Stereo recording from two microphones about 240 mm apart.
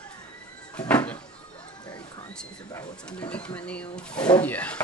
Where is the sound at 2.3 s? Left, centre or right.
Centre.